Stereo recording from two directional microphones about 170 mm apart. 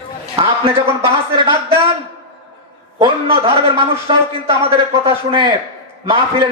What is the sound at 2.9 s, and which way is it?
A man's voice, 30° right (ahead or behind).